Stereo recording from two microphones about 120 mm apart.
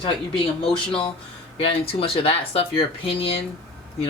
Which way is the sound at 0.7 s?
50° left (ahead or behind).